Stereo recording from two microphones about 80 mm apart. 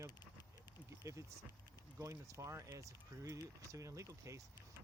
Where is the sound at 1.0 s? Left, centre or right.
Right.